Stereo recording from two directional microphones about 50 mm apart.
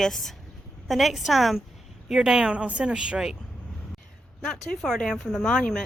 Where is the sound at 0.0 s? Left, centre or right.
Centre.